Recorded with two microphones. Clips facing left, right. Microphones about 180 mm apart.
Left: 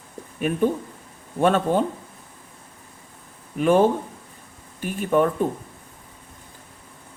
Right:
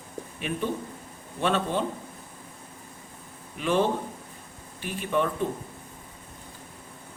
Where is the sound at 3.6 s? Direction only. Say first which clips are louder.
Left 7 dB; 50° left (ahead or behind).